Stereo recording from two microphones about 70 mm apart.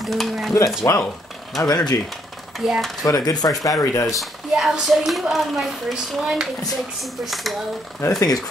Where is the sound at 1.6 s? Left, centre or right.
Left.